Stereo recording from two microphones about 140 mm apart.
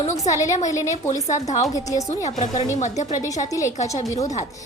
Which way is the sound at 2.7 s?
60° left (ahead or behind).